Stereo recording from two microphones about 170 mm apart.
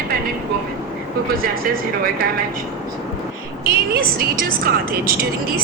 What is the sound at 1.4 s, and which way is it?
Speech, 60° right (ahead or behind).